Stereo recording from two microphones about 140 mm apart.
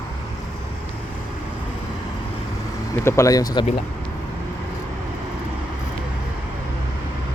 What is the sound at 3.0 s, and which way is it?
Speech, 20° left (ahead or behind).